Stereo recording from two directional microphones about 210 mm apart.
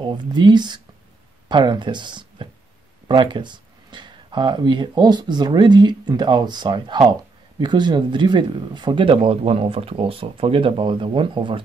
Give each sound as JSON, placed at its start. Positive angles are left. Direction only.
{"t": 0.0, "sound": "speech", "side_deg": -20}